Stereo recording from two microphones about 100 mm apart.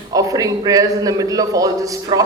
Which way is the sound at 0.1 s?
35° right (ahead or behind).